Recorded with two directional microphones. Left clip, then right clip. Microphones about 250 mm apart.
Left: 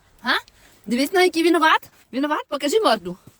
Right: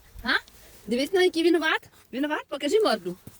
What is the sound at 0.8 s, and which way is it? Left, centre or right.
Speech, left.